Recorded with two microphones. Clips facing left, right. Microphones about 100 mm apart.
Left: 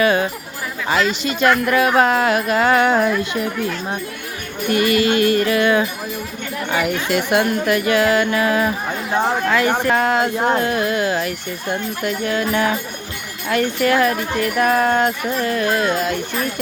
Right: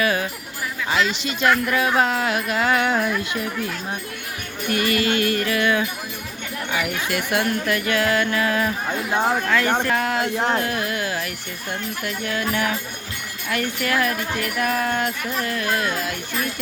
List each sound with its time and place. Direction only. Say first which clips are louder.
0.0 s music: left 6 dB; 30° left (ahead or behind)
1.2 s speech: left 4 dB; 50° left (ahead or behind)
4.7 s speech: left 5 dB; 25° left (ahead or behind)
9.1 s speech: left 2 dB; 5° left (ahead or behind)
9.5 s speech: left 3 dB; 15° left (ahead or behind)
9.9 s music: left 5 dB; 35° left (ahead or behind)
10.5 s speech: left 5 dB; 25° left (ahead or behind)
13.5 s music: left 7 dB; 30° left (ahead or behind)